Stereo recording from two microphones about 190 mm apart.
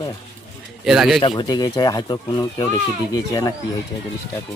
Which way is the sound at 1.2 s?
25° left (ahead or behind).